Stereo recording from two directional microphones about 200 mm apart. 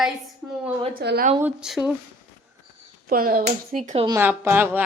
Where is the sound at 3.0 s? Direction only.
45° right (ahead or behind).